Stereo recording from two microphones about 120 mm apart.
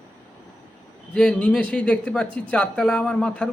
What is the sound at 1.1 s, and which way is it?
Speech, 5° left (ahead or behind).